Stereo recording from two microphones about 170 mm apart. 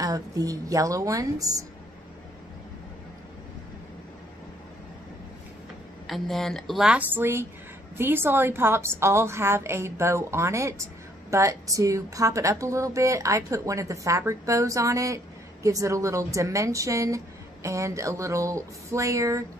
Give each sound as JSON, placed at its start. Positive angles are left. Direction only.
{"t": 0.0, "sound": "a woman's voice", "side_deg": -20}
{"t": 6.0, "sound": "a woman's voice", "side_deg": 0}